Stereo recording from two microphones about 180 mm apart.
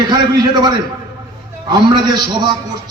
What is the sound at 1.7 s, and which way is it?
Speech, 25° right (ahead or behind).